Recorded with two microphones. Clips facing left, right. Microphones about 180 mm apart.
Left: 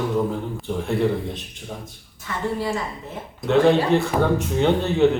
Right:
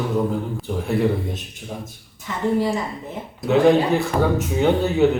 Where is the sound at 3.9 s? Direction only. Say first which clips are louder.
Even; centre (ahead or behind).